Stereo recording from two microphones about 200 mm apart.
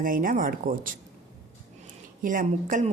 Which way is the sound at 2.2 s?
40° right (ahead or behind).